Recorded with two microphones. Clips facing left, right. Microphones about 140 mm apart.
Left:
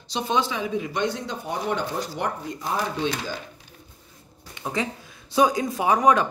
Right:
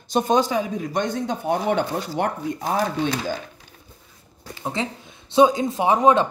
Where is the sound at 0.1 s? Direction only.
45° right (ahead or behind).